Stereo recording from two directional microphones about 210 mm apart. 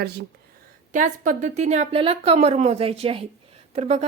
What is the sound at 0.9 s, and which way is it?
A woman's voice, 35° right (ahead or behind).